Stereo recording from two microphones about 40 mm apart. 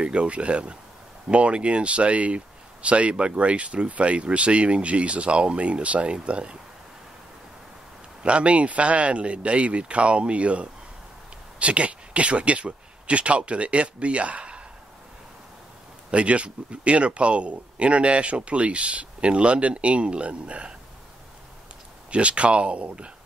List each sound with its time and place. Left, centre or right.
0.0 s speech: right
8.2 s speech: right
16.1 s speech: right
22.1 s speech: right